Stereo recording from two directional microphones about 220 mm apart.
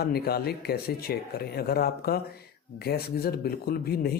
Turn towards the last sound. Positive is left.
turn(degrees=45)  # may be behind; listen again after turning